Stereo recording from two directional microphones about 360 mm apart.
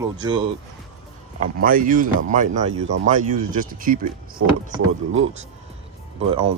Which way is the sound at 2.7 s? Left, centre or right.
Right.